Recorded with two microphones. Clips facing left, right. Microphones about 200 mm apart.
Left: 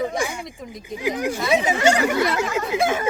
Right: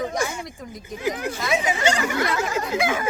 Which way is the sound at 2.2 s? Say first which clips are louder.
Left 2 dB; 20° left (ahead or behind).